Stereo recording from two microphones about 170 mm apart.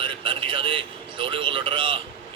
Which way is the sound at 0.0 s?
30° right (ahead or behind).